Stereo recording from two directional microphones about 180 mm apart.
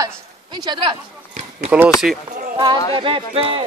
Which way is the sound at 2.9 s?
30° right (ahead or behind).